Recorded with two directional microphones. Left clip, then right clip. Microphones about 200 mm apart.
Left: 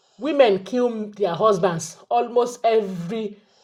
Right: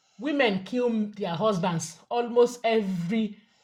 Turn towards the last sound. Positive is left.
turn(degrees=30)  # may be behind; listen again after turning